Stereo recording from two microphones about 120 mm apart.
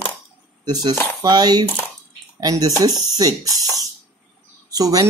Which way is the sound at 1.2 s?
35° right (ahead or behind).